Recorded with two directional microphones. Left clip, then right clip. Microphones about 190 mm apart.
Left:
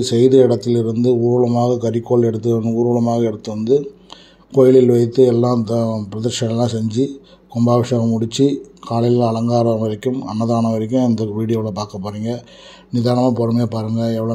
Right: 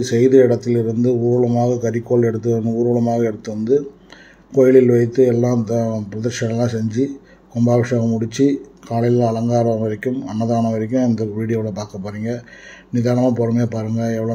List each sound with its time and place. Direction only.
0.0 s speech: 25° left (ahead or behind)